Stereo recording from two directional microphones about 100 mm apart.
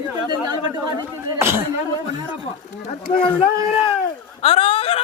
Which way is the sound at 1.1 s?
25° right (ahead or behind).